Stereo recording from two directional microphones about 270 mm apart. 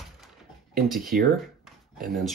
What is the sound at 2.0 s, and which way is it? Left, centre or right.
Speech, centre.